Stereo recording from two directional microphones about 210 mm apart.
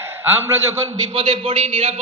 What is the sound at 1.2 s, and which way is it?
Speech, 25° right (ahead or behind).